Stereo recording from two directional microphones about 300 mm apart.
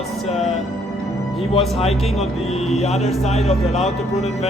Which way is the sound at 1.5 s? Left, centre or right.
Left.